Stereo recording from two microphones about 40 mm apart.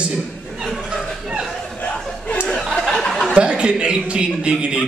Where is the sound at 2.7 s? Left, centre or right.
Centre.